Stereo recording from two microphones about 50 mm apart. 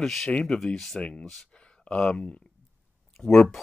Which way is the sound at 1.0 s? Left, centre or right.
Left.